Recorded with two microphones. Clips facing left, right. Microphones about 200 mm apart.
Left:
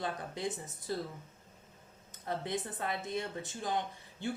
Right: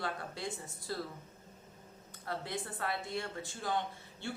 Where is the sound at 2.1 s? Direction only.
20° left (ahead or behind).